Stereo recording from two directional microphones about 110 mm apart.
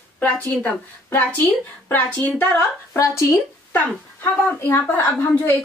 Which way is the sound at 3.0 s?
25° left (ahead or behind).